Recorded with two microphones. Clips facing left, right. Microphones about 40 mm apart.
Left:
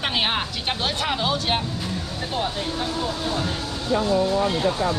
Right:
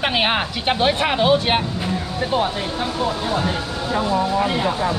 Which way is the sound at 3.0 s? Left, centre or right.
Centre.